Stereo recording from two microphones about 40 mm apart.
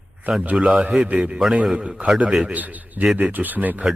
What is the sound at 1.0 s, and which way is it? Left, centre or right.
A man's voice, right.